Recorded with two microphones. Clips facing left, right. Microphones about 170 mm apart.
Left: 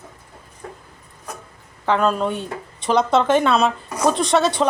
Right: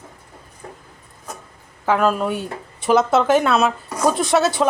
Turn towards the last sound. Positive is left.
turn(degrees=-5)  # may be behind; listen again after turning